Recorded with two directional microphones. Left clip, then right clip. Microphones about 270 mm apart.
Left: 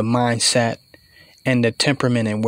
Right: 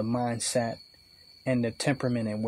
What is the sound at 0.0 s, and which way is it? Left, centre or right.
Speech, left.